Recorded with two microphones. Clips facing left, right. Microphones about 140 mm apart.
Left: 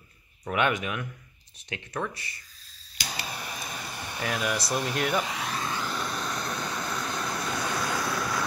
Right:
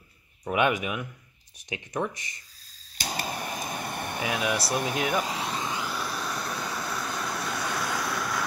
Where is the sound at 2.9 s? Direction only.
45° right (ahead or behind).